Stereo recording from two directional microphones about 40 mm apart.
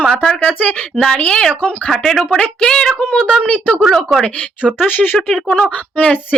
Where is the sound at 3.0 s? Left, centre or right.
Left.